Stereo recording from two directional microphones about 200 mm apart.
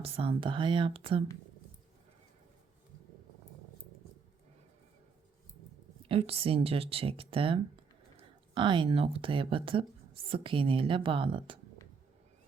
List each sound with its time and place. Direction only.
0.0 s speech: 25° right (ahead or behind)
6.1 s speech: 30° right (ahead or behind)